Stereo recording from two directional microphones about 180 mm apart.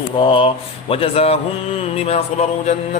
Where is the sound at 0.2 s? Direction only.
30° left (ahead or behind).